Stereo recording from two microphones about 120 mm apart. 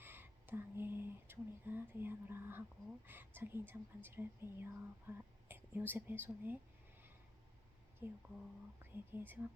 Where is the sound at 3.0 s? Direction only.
15° right (ahead or behind).